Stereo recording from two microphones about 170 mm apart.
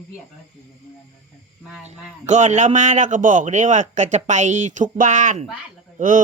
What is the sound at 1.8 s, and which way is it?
A man's voice, 45° right (ahead or behind).